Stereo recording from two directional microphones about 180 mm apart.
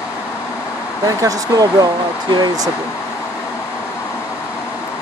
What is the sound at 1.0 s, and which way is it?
Speech, 20° right (ahead or behind).